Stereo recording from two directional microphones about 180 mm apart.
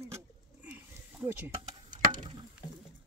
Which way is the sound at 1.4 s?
50° right (ahead or behind).